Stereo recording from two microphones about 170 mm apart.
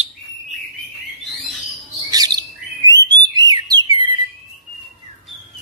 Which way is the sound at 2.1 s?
20° right (ahead or behind).